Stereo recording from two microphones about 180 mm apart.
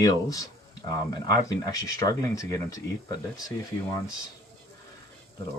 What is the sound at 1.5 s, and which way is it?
Speech, 20° left (ahead or behind).